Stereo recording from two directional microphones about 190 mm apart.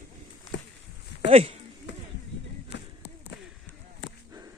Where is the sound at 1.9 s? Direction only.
70° left (ahead or behind).